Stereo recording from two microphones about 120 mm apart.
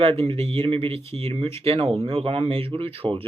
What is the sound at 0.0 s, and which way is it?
Speech, 50° right (ahead or behind).